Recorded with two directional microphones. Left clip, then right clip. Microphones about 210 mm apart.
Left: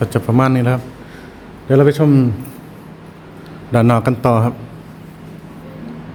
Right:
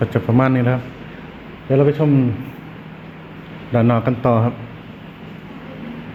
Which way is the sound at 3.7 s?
30° left (ahead or behind).